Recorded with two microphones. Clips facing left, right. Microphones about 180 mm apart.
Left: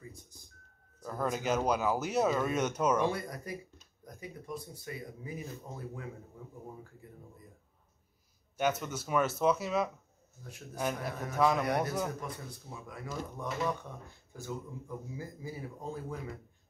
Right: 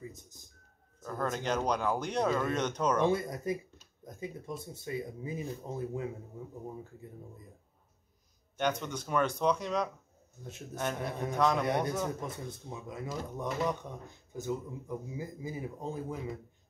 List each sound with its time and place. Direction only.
1.0 s speech: 10° left (ahead or behind)
3.1 s speech: 20° right (ahead or behind)
8.5 s speech: 5° left (ahead or behind)
12.2 s speech: 25° right (ahead or behind)